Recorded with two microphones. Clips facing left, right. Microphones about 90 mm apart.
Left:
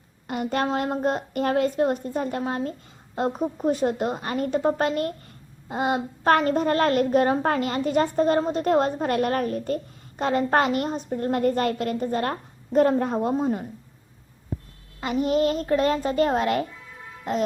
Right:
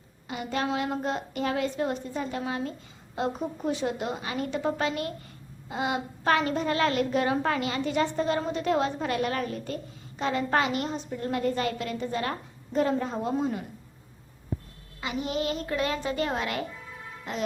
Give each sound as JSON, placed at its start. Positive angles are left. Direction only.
{"t": 0.3, "sound": "a woman's voice", "side_deg": 50}
{"t": 13.1, "sound": "a woman's voice", "side_deg": 40}
{"t": 15.0, "sound": "a woman's voice", "side_deg": 45}